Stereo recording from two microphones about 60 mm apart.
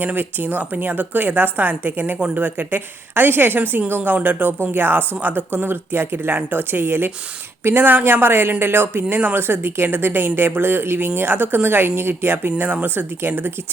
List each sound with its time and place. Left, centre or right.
0.0 s speech: right